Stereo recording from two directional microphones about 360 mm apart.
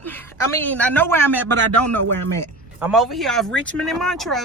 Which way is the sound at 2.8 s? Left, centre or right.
Centre.